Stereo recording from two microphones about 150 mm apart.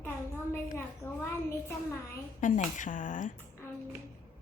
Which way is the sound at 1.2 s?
20° left (ahead or behind).